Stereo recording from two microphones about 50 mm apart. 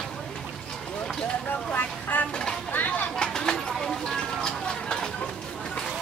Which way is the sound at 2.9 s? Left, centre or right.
Centre.